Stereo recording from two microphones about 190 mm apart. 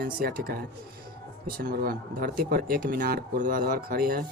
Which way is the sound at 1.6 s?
50° right (ahead or behind).